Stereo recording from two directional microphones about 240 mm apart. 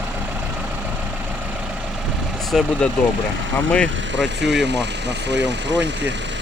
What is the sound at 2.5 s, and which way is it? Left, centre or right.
Speech, centre.